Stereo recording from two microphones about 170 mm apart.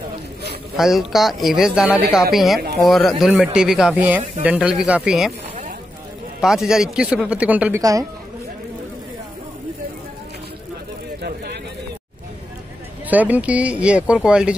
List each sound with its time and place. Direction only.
0.7 s speech: centre (ahead or behind)
6.4 s speech: centre (ahead or behind)
7.8 s speech: 20° right (ahead or behind)
11.2 s a sound: 70° right (ahead or behind)
13.1 s speech: 10° right (ahead or behind)